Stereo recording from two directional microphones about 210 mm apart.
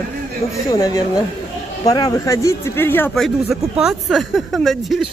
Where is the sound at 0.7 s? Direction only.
15° left (ahead or behind).